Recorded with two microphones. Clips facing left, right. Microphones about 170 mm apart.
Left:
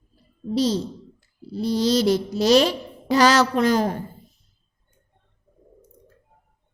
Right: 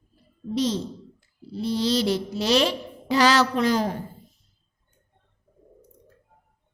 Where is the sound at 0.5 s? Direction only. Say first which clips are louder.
Left 3 dB; 35° left (ahead or behind).